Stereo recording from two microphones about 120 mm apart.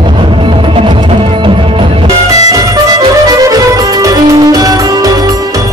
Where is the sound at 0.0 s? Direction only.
45° right (ahead or behind).